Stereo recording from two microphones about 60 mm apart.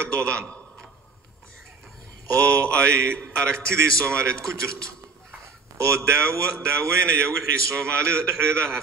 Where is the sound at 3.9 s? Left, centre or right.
Right.